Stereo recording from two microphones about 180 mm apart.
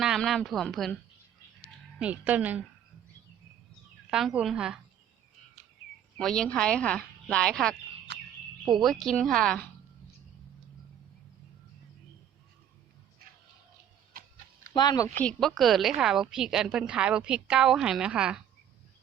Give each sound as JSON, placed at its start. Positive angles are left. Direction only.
{"t": 0.0, "sound": "a woman's voice", "side_deg": 0}
{"t": 2.0, "sound": "a woman's voice", "side_deg": -5}
{"t": 4.1, "sound": "a woman's voice", "side_deg": 0}
{"t": 6.1, "sound": "a woman's voice", "side_deg": 5}
{"t": 8.1, "sound": "a sound", "side_deg": -70}
{"t": 8.6, "sound": "a woman's voice", "side_deg": 0}
{"t": 14.7, "sound": "speech", "side_deg": 20}
{"t": 15.2, "sound": "a woman's voice", "side_deg": 5}